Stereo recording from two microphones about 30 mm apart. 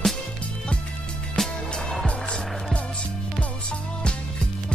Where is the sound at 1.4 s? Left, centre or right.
Centre.